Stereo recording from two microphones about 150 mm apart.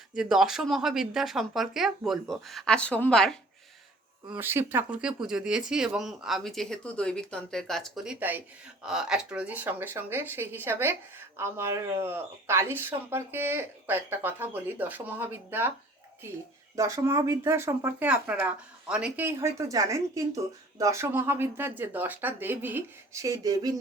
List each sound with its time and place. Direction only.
0.1 s speech: 5° right (ahead or behind)
4.4 s speech: 15° right (ahead or behind)
16.7 s speech: 20° right (ahead or behind)
23.2 s speech: 25° right (ahead or behind)